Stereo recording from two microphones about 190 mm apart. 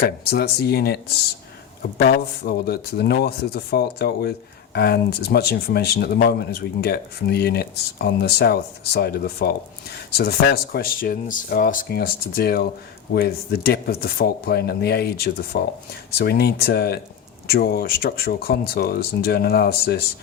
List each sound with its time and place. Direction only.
0.0 s speech: 55° left (ahead or behind)
2.0 s speech: 55° left (ahead or behind)